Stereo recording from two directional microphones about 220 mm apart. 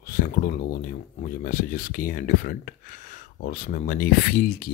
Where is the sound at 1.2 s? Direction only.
35° left (ahead or behind).